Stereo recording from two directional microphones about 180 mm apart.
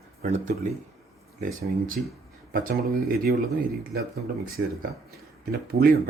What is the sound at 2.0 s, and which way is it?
Speech, 60° right (ahead or behind).